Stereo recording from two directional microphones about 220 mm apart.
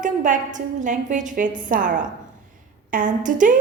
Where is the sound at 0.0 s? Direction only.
35° right (ahead or behind).